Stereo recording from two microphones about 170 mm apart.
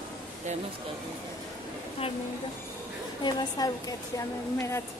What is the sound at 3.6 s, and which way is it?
A woman's voice, 20° left (ahead or behind).